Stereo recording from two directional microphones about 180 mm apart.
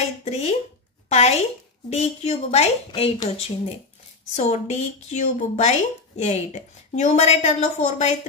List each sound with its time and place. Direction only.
0.2 s a sound: 35° left (ahead or behind)
1.0 s a woman's voice: 35° left (ahead or behind)
4.4 s speech: 40° left (ahead or behind)